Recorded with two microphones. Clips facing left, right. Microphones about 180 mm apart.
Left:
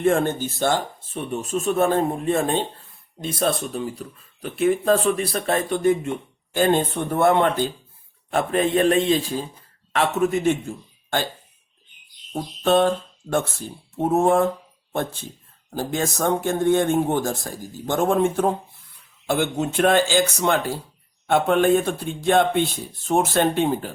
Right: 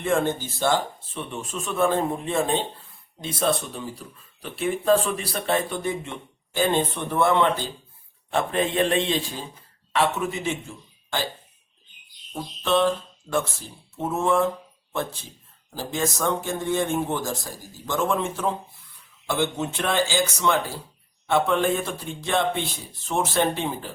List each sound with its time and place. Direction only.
0.0 s speech: 55° left (ahead or behind)
4.6 s a man's voice: 45° left (ahead or behind)
12.3 s a sound: 55° left (ahead or behind)
14.0 s speech: 55° left (ahead or behind)